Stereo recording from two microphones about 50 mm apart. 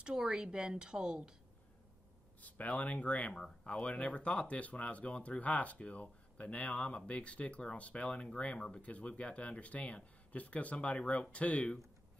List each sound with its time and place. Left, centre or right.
0.0 s a woman's voice: centre
2.4 s speech: left
3.3 s speech: centre